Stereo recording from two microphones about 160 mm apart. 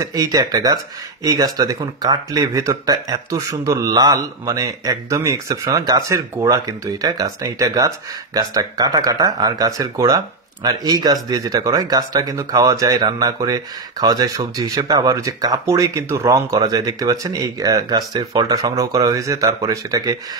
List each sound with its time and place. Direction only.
0.0 s speech: 20° right (ahead or behind)